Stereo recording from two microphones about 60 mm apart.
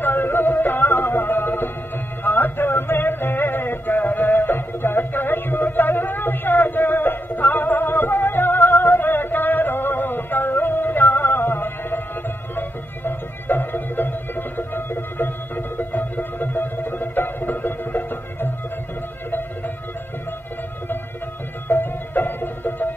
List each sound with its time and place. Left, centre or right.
0.0 s music: left
21.6 s music: left